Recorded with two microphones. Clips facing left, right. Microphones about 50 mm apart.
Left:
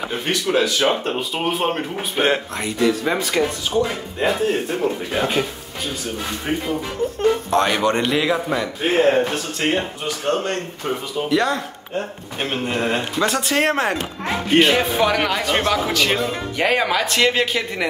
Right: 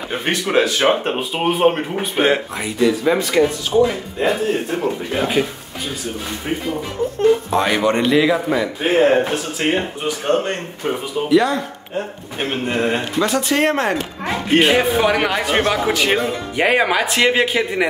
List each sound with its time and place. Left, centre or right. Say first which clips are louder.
0.2 s speech: right 3 dB; right
1.0 s speech: right 3 dB; right; by 5.5 s centre
7.2 s speech: right 3 dB; centre
11.2 s speech: right 4 dB; centre
14.6 s speech: right 1 dB; centre